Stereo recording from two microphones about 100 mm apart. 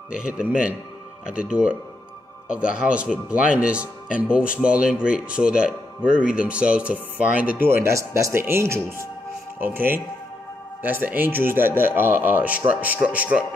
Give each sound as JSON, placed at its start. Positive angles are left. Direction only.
{"t": 0.1, "sound": "a man's voice", "side_deg": -10}